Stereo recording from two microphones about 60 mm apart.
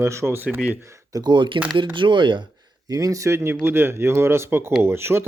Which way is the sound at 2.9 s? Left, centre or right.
Right.